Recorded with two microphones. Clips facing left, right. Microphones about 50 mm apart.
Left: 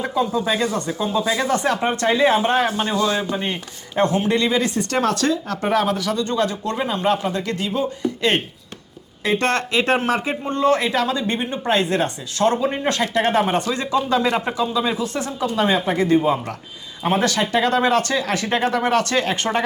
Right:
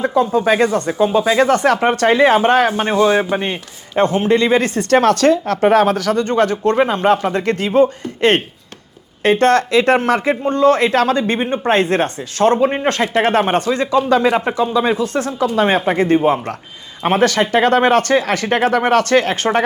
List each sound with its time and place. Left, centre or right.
0.3 s a man's voice: right
3.3 s a sound: right
4.0 s a man's voice: right
13.3 s a man's voice: right